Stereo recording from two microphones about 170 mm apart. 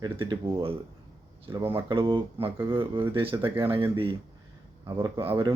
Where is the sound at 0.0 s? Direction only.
30° right (ahead or behind).